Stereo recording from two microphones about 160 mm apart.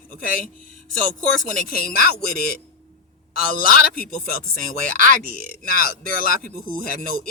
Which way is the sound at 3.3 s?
65° left (ahead or behind).